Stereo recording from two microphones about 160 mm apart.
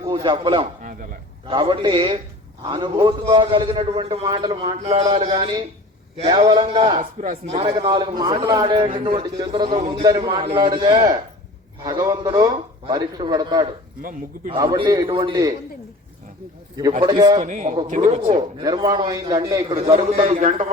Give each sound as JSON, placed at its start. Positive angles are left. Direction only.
{"t": 0.1, "sound": "a man's voice", "side_deg": -30}
{"t": 4.3, "sound": "a man's voice", "side_deg": -25}
{"t": 4.8, "sound": "a man's voice", "side_deg": -40}
{"t": 5.3, "sound": "a man's voice", "side_deg": -30}
{"t": 17.0, "sound": "a man's voice", "side_deg": -30}
{"t": 17.4, "sound": "speech", "side_deg": -50}
{"t": 18.3, "sound": "a man's voice", "side_deg": -25}
{"t": 20.3, "sound": "a man's voice", "side_deg": -55}